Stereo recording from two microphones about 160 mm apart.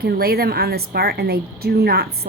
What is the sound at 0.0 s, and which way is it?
A woman's voice, 75° right (ahead or behind).